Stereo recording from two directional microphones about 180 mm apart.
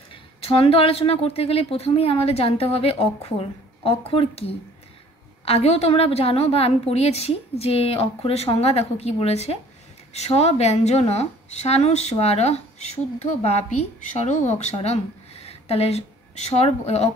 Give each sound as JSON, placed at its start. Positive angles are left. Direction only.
{"t": 0.1, "sound": "speech", "side_deg": 30}